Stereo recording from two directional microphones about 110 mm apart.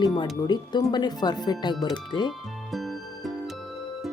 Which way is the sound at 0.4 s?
40° left (ahead or behind).